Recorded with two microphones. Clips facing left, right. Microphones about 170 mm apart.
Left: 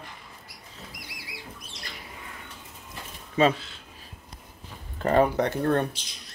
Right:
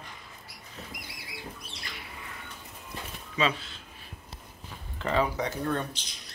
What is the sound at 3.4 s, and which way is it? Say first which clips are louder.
Speech: left 7 dB; 50° left (ahead or behind).